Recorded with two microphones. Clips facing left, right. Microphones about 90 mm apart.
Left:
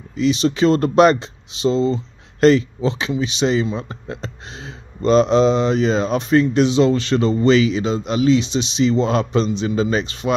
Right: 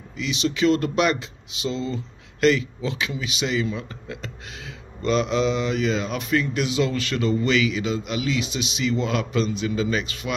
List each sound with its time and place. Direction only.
0.1 s speech: 35° left (ahead or behind)